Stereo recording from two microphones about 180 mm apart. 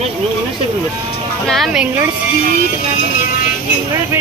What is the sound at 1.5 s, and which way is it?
Speech, centre (ahead or behind).